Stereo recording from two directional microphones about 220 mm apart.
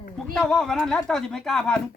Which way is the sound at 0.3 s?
Centre (ahead or behind).